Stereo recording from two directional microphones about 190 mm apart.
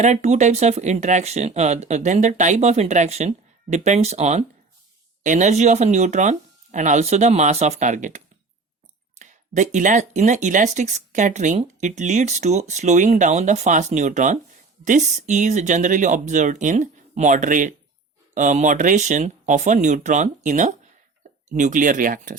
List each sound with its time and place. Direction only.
0.0 s speech: 35° right (ahead or behind)